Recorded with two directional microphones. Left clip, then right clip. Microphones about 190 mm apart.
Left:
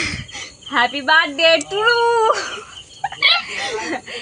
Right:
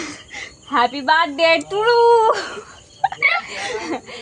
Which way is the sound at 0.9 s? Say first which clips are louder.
Left 1 dB; 60° right (ahead or behind).